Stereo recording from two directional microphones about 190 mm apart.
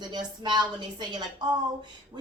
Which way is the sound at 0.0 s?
25° right (ahead or behind).